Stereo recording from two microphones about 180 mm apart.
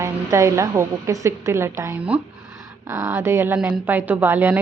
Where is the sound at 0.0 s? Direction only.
15° right (ahead or behind).